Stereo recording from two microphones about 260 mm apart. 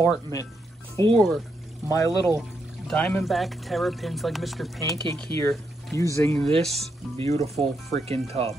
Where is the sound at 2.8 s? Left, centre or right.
Centre.